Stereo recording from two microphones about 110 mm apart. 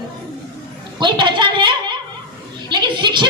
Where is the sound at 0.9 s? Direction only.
45° right (ahead or behind).